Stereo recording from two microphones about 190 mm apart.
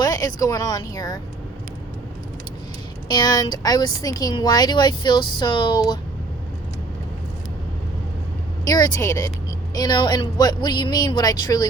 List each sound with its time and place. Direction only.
0.0 s speech: 20° left (ahead or behind)
3.1 s speech: 20° left (ahead or behind)
8.6 s speech: 20° left (ahead or behind)